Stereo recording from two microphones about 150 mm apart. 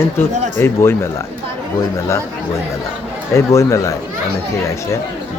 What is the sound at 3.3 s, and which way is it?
Speech, 20° left (ahead or behind).